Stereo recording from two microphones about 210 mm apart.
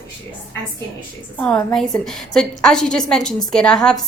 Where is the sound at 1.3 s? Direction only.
5° left (ahead or behind).